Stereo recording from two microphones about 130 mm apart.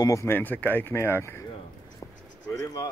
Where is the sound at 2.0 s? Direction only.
35° left (ahead or behind).